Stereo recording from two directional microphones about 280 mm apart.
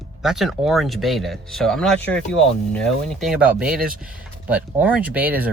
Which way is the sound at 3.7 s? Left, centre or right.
Right.